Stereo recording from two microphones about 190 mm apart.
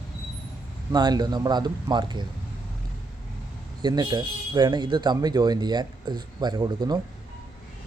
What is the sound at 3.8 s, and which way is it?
Speech, 20° right (ahead or behind).